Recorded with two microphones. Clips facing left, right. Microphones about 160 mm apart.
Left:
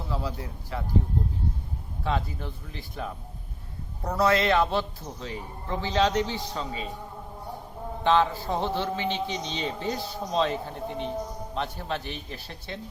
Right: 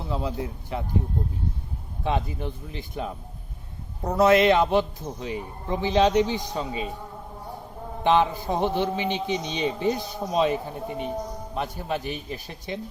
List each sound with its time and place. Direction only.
0.1 s speech: 20° right (ahead or behind)
2.0 s a man's voice: 20° right (ahead or behind)
8.0 s a man's voice: 15° right (ahead or behind)